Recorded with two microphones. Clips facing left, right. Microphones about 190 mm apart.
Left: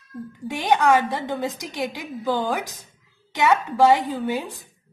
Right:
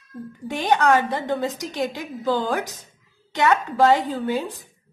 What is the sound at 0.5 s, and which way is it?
A woman's voice, 15° left (ahead or behind).